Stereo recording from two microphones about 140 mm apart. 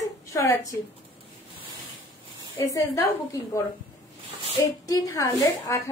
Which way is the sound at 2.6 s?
25° left (ahead or behind).